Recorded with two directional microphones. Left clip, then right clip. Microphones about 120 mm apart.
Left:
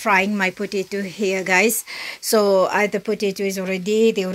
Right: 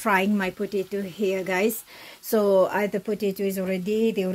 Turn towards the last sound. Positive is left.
turn(degrees=0)  # may be behind; listen again after turning